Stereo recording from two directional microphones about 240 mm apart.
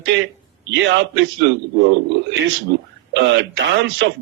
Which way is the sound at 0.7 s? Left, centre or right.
Right.